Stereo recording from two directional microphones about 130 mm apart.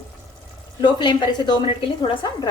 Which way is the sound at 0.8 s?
35° left (ahead or behind).